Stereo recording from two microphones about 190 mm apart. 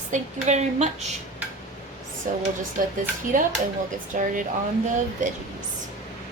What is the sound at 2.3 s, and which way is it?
Speech, 45° right (ahead or behind).